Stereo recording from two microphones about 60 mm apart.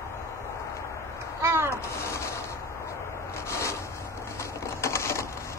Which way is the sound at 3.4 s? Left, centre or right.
Left.